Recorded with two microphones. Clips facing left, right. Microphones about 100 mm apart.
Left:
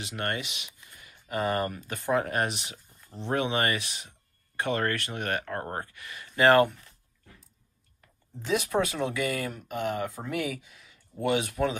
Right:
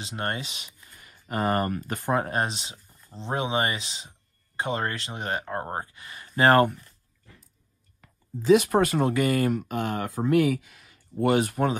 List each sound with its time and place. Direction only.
0.0 s speech: 25° right (ahead or behind); by 2.0 s 50° right (ahead or behind)
2.1 s speech: 30° right (ahead or behind)
8.0 s a sound: 70° right (ahead or behind)
8.6 s speech: 50° right (ahead or behind)
9.5 s speech: 70° right (ahead or behind)
11.1 s speech: 45° right (ahead or behind)